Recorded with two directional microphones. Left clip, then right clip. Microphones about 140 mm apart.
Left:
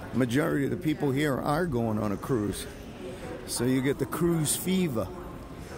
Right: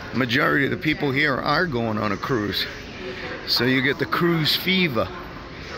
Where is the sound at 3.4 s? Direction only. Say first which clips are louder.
Right 8 dB; 25° left (ahead or behind).